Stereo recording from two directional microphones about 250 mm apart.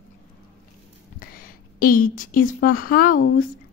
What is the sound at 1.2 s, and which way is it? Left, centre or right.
A woman's voice, left.